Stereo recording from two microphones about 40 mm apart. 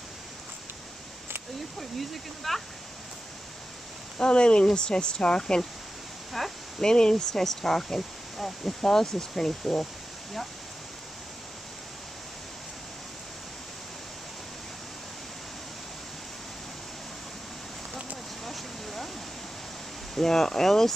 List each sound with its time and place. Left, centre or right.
1.8 s speech: centre
4.2 s speech: left
6.4 s speech: centre
6.8 s speech: centre
18.4 s a sound: centre
20.2 s speech: centre